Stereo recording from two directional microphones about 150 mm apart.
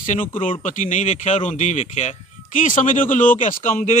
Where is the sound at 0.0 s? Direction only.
60° left (ahead or behind).